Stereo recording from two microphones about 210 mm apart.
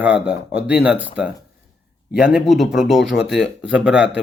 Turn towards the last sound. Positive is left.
turn(degrees=-5)  # may be behind; listen again after turning